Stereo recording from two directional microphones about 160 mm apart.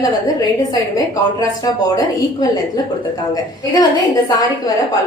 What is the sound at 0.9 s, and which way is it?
A woman's voice, 25° left (ahead or behind).